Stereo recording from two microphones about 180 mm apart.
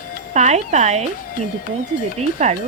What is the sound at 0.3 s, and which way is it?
Speech, 40° right (ahead or behind).